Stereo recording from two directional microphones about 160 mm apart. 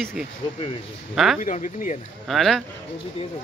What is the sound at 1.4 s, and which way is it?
Speech, 55° left (ahead or behind).